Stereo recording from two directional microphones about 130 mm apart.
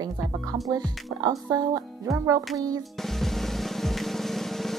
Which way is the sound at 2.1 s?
25° right (ahead or behind).